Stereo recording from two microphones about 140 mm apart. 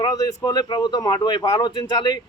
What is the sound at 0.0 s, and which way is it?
A man's voice, 25° left (ahead or behind).